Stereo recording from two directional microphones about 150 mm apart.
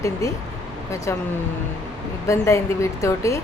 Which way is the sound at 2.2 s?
20° left (ahead or behind).